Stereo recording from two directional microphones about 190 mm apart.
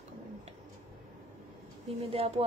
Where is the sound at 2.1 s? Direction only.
30° right (ahead or behind).